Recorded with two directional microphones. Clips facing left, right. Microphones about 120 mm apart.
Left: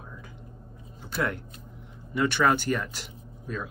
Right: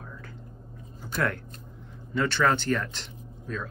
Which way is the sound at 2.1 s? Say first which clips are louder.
Left 1 dB; 15° left (ahead or behind).